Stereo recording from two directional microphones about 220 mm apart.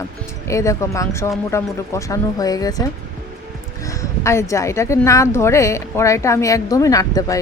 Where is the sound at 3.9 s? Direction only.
15° left (ahead or behind).